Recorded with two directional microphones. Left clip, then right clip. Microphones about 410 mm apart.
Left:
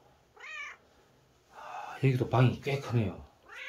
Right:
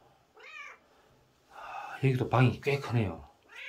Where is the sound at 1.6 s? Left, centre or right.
Centre.